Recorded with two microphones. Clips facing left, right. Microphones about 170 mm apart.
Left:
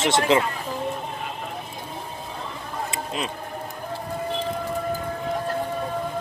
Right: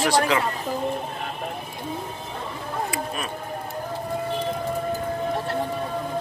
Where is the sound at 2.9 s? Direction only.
20° left (ahead or behind).